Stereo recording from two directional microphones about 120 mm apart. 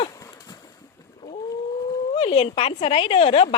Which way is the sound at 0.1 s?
30° left (ahead or behind).